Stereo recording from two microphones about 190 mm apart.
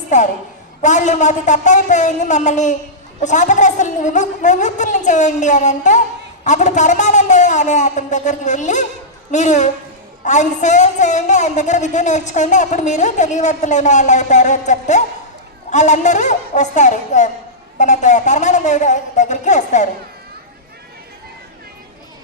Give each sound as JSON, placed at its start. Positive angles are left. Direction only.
{"t": 0.1, "sound": "a woman's voice", "side_deg": 40}